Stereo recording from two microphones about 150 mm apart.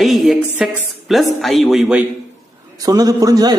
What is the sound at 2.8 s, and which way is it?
Speech, 25° right (ahead or behind).